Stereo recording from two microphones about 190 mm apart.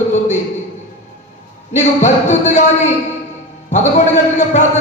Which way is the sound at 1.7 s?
40° left (ahead or behind).